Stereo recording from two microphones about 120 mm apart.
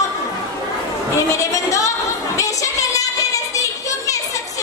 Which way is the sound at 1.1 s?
25° left (ahead or behind).